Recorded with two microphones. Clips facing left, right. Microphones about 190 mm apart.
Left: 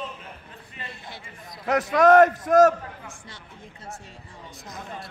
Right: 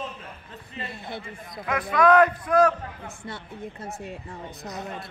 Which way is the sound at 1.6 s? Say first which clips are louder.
Left 3 dB; 45° left (ahead or behind).